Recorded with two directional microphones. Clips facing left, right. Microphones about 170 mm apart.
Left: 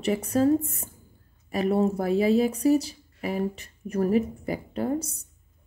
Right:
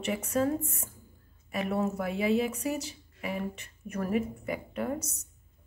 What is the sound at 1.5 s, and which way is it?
A woman's voice, 35° left (ahead or behind).